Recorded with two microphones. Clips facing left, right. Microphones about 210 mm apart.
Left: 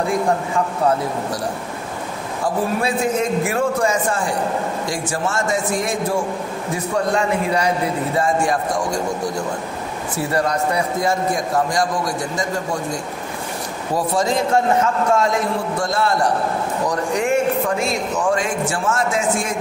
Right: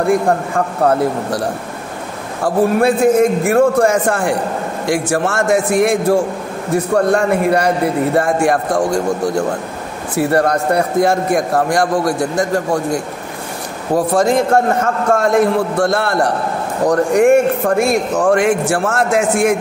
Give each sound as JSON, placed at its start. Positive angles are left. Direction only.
{"t": 0.0, "sound": "a man's voice", "side_deg": -55}
{"t": 2.4, "sound": "a man's voice", "side_deg": -50}
{"t": 10.1, "sound": "a man's voice", "side_deg": -60}
{"t": 13.9, "sound": "a man's voice", "side_deg": -55}